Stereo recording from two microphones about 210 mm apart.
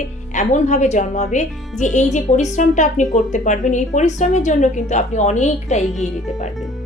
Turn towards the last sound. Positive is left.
turn(degrees=35)  # may be behind; listen again after turning